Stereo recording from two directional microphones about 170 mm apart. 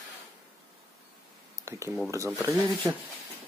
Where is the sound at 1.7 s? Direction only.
15° right (ahead or behind).